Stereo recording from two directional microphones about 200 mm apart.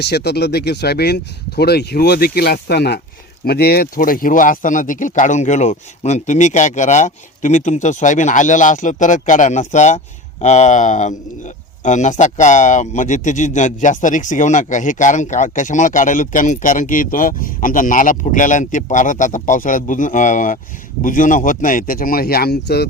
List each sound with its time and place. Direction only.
0.0 s speech: 55° left (ahead or behind)